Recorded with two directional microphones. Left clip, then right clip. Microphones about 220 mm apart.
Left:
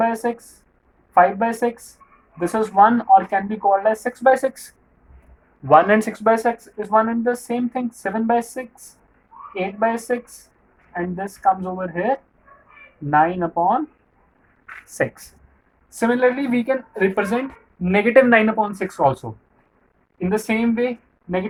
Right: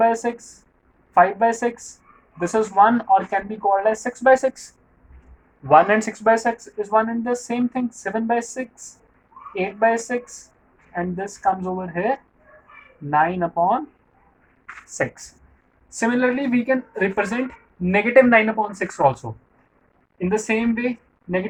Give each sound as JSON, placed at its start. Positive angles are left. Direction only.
{"t": 0.0, "sound": "speech", "side_deg": 20}
{"t": 14.8, "sound": "speech", "side_deg": 25}
{"t": 17.9, "sound": "speech", "side_deg": 30}
{"t": 20.1, "sound": "speech", "side_deg": 15}